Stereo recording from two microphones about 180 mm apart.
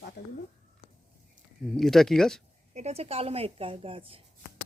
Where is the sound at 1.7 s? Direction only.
Centre (ahead or behind).